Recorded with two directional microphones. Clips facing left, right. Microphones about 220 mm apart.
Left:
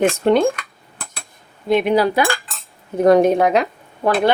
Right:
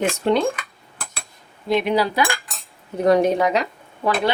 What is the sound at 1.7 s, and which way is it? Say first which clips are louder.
Speech: left 4 dB; 50° left (ahead or behind).